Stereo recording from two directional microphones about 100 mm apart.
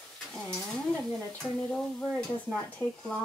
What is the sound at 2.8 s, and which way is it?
Speech, 30° left (ahead or behind).